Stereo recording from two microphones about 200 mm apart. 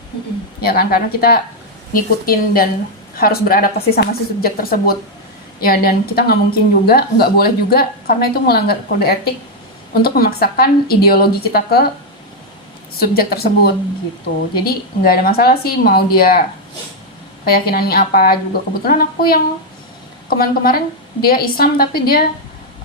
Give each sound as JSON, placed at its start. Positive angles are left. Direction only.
{"t": 0.6, "sound": "a woman's voice", "side_deg": 50}
{"t": 13.0, "sound": "a woman's voice", "side_deg": 50}
{"t": 14.5, "sound": "a woman's voice", "side_deg": 50}
{"t": 17.4, "sound": "a woman's voice", "side_deg": 50}
{"t": 20.4, "sound": "a woman's voice", "side_deg": 50}